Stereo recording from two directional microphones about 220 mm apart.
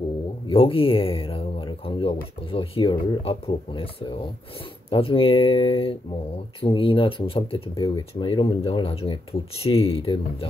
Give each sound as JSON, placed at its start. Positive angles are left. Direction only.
{"t": 0.5, "sound": "speech", "side_deg": 25}
{"t": 4.8, "sound": "speech", "side_deg": 25}